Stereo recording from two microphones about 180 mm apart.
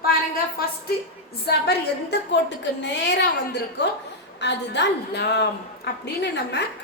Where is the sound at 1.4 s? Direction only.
65° left (ahead or behind).